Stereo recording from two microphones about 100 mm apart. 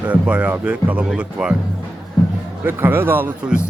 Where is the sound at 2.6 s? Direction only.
20° right (ahead or behind).